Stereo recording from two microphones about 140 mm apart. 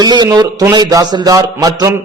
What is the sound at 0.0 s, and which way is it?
A man's voice, 30° right (ahead or behind).